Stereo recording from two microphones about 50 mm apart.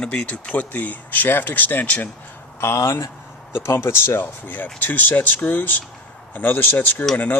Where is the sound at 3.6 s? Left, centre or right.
Left.